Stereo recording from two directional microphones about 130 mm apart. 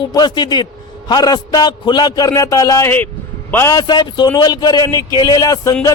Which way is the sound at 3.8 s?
35° left (ahead or behind).